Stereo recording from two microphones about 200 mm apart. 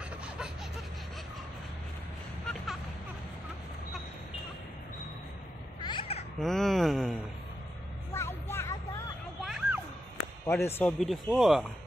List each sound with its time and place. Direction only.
2.4 s music: centre (ahead or behind)
5.8 s a sound: 25° left (ahead or behind)
6.4 s speech: centre (ahead or behind)
8.1 s a sound: 10° left (ahead or behind)
9.4 s music: centre (ahead or behind)
10.4 s speech: 10° left (ahead or behind)